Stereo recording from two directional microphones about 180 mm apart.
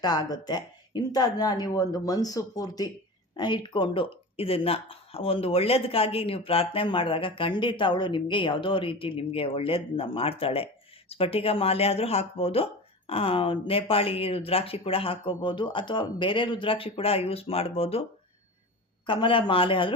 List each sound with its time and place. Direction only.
0.0 s speech: 20° left (ahead or behind)
19.0 s speech: 25° left (ahead or behind)